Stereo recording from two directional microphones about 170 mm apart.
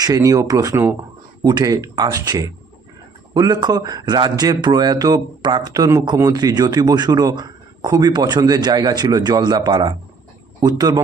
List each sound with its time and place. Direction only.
0.0 s speech: 20° right (ahead or behind)